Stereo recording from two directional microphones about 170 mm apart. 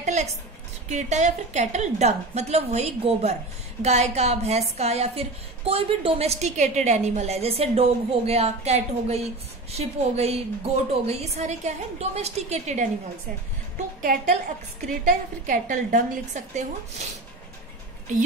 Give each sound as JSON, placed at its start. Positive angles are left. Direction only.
{"t": 0.0, "sound": "a woman's voice", "side_deg": -40}
{"t": 14.9, "sound": "a woman's voice", "side_deg": -55}